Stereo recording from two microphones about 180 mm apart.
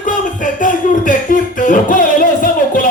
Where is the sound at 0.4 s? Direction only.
45° left (ahead or behind).